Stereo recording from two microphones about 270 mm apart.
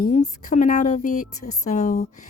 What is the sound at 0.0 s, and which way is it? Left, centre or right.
Speech, left.